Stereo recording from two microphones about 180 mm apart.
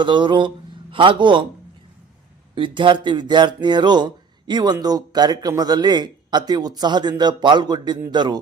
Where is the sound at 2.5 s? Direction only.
25° right (ahead or behind).